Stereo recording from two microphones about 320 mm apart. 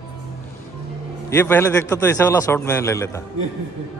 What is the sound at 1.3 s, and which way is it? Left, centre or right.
A man's voice, centre.